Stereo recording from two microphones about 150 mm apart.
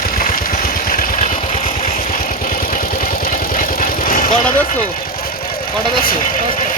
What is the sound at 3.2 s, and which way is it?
Vehicle, 70° left (ahead or behind).